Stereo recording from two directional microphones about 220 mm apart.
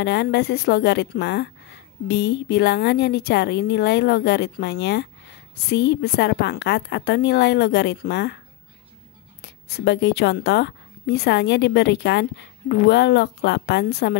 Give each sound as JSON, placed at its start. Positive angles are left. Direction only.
{"t": 0.0, "sound": "a woman's voice", "side_deg": 50}
{"t": 9.4, "sound": "a woman's voice", "side_deg": 50}